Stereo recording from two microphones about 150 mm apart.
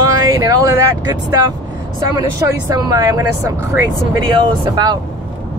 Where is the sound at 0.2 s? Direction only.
25° right (ahead or behind).